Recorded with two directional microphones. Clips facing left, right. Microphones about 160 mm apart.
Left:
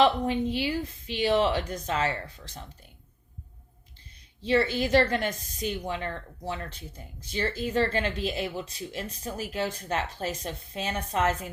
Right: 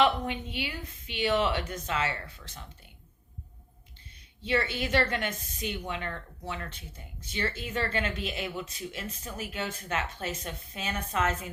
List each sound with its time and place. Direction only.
0.0 s a woman's voice: 35° left (ahead or behind)
4.4 s a woman's voice: 35° left (ahead or behind)